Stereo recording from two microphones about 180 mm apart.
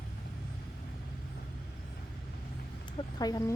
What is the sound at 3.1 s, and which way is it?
Speech, 20° left (ahead or behind).